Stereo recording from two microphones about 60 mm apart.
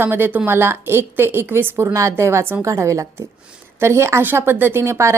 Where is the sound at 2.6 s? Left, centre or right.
Right.